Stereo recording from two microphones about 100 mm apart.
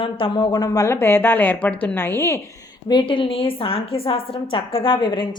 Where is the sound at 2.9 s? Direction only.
55° left (ahead or behind).